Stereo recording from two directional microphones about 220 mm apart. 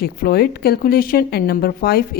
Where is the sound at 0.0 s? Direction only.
45° left (ahead or behind).